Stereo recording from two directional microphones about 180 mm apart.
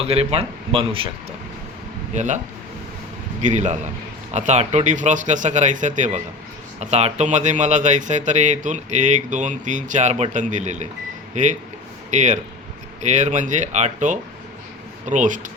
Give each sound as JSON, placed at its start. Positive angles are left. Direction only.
{"t": 0.0, "sound": "speech", "side_deg": -35}
{"t": 2.1, "sound": "speech", "side_deg": -40}
{"t": 3.4, "sound": "speech", "side_deg": -40}